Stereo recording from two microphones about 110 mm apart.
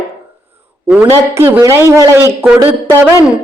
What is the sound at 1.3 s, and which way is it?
A woman's voice, 20° right (ahead or behind).